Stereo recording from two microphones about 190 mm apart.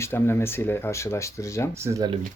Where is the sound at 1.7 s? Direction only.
15° right (ahead or behind).